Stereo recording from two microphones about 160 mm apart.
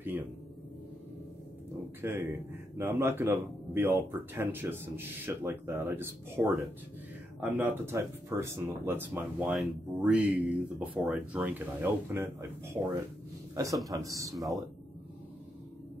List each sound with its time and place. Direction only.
0.1 s music: 10° right (ahead or behind)
2.0 s speech: 15° right (ahead or behind)
13.8 s speech: 20° right (ahead or behind)